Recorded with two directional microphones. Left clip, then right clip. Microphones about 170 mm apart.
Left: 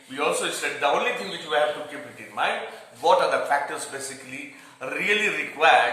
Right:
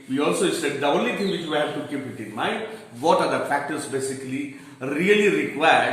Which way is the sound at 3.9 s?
15° left (ahead or behind).